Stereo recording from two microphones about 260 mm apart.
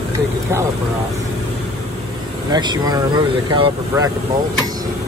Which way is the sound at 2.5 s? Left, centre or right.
Centre.